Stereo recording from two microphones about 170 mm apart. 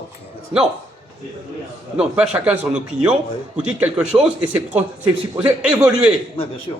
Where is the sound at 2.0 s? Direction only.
5° right (ahead or behind).